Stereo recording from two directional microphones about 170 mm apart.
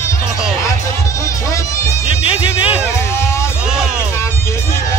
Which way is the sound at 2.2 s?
30° left (ahead or behind).